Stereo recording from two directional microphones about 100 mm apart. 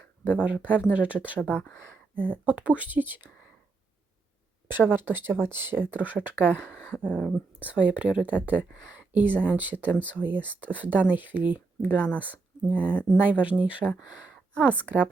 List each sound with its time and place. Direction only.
0.4 s speech: 15° right (ahead or behind)
1.4 s speech: 15° left (ahead or behind)
2.1 s speech: 20° right (ahead or behind)
4.7 s speech: 20° right (ahead or behind)
6.9 s speech: 10° left (ahead or behind)
7.6 s speech: 15° right (ahead or behind)